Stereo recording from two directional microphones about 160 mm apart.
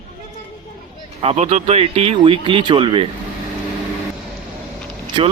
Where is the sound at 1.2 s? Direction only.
40° right (ahead or behind).